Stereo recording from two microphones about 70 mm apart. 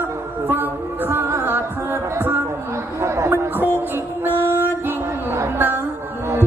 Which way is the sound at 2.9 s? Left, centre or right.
Right.